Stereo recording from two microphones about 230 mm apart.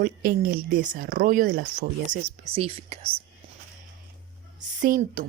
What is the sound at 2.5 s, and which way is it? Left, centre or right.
Speech, right.